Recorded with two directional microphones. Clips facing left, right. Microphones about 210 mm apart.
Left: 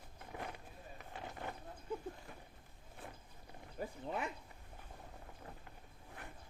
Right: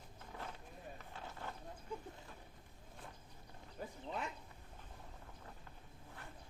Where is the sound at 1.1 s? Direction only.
15° left (ahead or behind).